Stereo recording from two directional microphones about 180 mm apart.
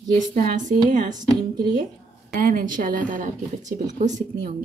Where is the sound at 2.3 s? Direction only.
50° right (ahead or behind).